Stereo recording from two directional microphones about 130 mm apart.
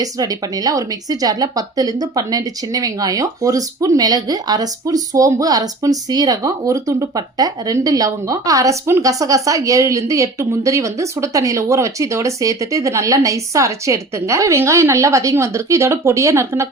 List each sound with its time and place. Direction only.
0.0 s speech: 30° right (ahead or behind)